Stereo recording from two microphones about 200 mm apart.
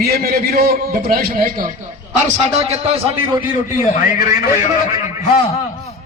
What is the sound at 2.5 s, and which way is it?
Speech, 30° right (ahead or behind).